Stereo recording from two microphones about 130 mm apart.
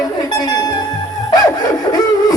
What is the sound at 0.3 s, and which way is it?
Music, 30° left (ahead or behind).